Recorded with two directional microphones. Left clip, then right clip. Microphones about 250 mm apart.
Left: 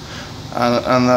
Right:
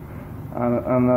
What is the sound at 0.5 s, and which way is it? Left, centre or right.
Speech, left.